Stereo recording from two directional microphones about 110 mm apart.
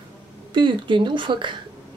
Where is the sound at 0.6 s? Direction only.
45° right (ahead or behind).